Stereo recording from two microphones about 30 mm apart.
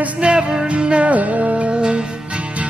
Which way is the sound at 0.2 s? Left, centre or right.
Right.